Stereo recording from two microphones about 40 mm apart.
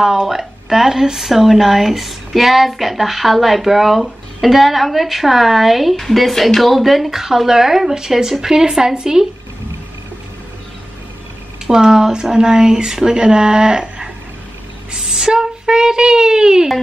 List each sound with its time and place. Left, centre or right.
0.0 s speech: centre
11.6 s speech: centre